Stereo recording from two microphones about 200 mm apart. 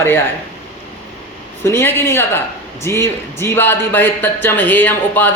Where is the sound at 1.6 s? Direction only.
10° left (ahead or behind).